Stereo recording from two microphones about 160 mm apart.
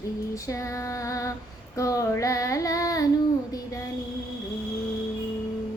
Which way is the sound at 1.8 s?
20° left (ahead or behind).